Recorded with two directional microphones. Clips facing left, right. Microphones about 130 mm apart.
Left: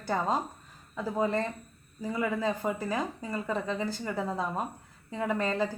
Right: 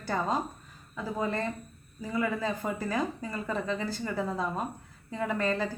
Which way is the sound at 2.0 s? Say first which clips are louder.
Even; 25° left (ahead or behind).